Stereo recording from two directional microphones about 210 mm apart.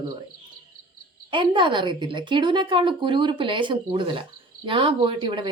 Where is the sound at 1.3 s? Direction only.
25° right (ahead or behind).